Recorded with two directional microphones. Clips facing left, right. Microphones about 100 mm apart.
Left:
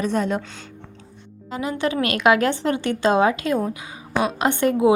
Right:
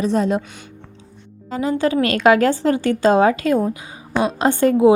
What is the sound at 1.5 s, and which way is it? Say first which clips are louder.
A woman's voice: right 5 dB; 30° right (ahead or behind).